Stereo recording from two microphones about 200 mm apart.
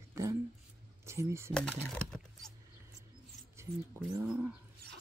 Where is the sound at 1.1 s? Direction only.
15° right (ahead or behind).